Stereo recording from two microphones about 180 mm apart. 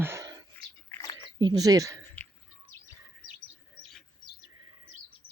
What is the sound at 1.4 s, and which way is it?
Speech, 20° right (ahead or behind).